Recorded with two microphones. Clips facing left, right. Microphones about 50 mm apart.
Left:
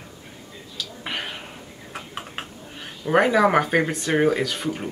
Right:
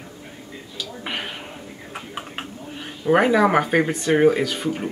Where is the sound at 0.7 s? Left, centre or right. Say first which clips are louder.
Right 1 dB; centre.